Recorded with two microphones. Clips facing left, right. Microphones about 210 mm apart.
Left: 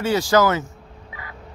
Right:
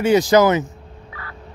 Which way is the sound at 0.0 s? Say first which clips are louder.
Right 4 dB; 20° right (ahead or behind).